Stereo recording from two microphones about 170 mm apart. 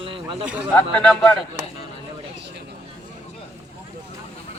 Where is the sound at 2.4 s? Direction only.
90° right.